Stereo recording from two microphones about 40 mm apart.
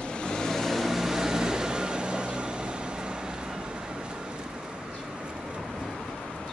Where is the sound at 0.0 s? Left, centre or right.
Centre; by 4.2 s right.